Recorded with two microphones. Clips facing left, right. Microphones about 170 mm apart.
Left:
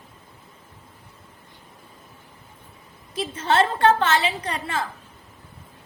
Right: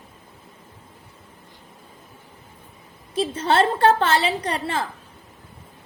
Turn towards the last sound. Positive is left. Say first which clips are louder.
# right 3 dB
turn(degrees=-35)  # may be behind; listen again after turning